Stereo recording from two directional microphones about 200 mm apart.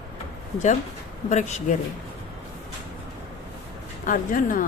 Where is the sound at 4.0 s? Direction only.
40° left (ahead or behind).